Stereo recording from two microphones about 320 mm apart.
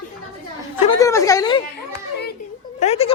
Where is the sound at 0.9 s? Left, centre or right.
Centre.